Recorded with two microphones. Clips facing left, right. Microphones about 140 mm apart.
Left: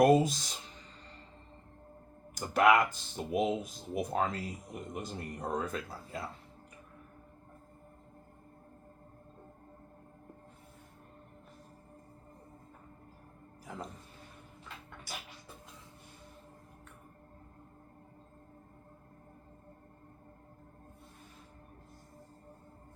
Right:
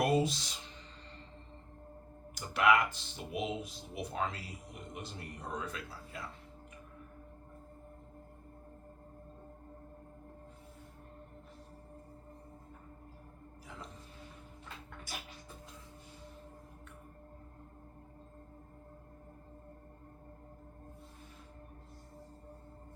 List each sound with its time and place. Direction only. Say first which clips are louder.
0.0 s speech: left 6 dB; 45° left (ahead or behind)
2.3 s speech: left 3 dB; 45° left (ahead or behind)